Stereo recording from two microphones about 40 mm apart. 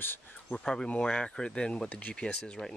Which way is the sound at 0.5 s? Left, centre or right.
Centre.